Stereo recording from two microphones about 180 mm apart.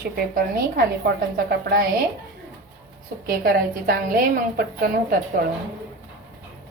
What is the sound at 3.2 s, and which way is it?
Speech, 55° right (ahead or behind).